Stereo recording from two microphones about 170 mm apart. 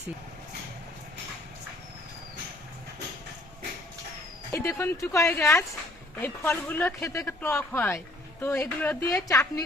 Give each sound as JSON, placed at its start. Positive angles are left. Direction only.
{"t": 4.5, "sound": "speech", "side_deg": 20}